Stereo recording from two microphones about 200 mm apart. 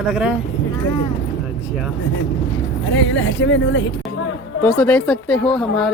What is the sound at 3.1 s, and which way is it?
Speech, 75° left (ahead or behind).